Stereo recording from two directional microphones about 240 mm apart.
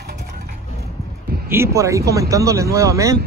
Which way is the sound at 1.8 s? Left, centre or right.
Centre.